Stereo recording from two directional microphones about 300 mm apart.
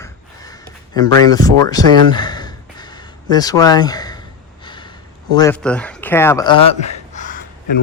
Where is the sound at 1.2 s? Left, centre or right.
Centre.